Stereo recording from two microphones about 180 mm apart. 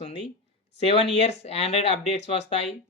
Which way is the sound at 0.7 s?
35° left (ahead or behind).